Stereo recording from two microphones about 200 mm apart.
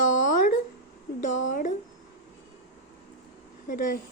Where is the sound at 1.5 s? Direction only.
40° left (ahead or behind).